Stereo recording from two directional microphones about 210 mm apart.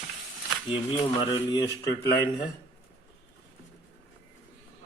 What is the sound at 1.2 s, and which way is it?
Speech, 20° left (ahead or behind).